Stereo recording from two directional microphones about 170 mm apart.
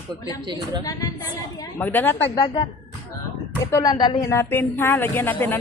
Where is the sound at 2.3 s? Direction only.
25° left (ahead or behind).